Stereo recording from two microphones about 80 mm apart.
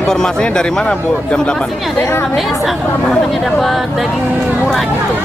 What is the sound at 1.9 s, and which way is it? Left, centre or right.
Speech, left.